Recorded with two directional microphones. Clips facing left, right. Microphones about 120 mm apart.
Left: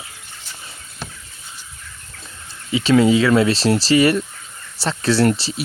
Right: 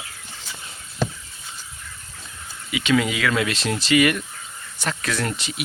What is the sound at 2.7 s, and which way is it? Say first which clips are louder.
Speech: left 7 dB; 35° left (ahead or behind).